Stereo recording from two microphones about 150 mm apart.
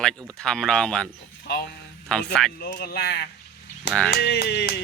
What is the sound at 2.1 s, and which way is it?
Speech, 5° left (ahead or behind).